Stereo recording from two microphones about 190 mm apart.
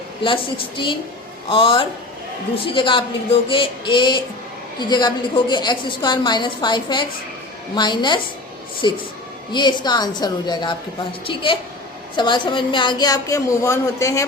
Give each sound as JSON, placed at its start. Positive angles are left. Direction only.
{"t": 0.2, "sound": "a woman's voice", "side_deg": 25}
{"t": 12.1, "sound": "a woman's voice", "side_deg": 25}